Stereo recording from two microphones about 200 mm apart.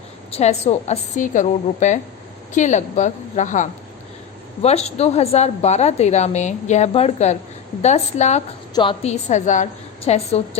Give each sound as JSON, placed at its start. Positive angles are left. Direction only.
{"t": 0.3, "sound": "a woman's voice", "side_deg": 30}
{"t": 9.3, "sound": "a woman's voice", "side_deg": 35}